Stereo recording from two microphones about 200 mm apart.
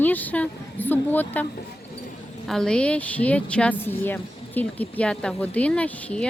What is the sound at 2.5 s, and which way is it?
Speech, 5° left (ahead or behind).